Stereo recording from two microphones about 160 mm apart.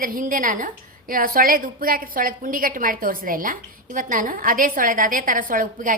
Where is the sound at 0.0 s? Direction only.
60° right (ahead or behind).